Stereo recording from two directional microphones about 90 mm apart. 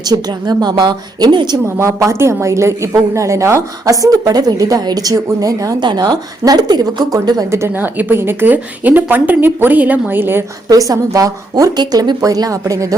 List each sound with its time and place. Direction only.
0.1 s a woman's voice: 50° right (ahead or behind)
1.6 s a woman's voice: 30° right (ahead or behind)
5.8 s a woman's voice: 50° right (ahead or behind)
7.5 s a woman's voice: 30° right (ahead or behind)
10.7 s a woman's voice: 40° right (ahead or behind)
11.8 s a woman's voice: 50° right (ahead or behind)